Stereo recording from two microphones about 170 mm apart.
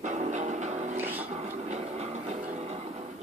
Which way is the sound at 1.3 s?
40° right (ahead or behind).